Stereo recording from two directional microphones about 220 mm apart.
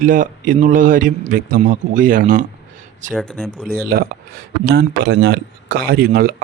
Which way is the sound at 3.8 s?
45° right (ahead or behind).